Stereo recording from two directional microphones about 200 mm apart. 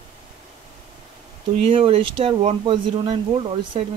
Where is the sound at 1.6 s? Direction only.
25° right (ahead or behind).